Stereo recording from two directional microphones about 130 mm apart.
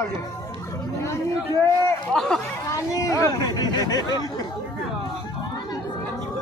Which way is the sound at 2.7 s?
25° left (ahead or behind).